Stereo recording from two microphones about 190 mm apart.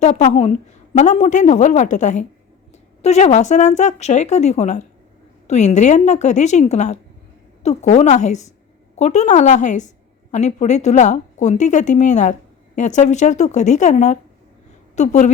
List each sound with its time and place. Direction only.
0.0 s a woman's voice: 40° left (ahead or behind)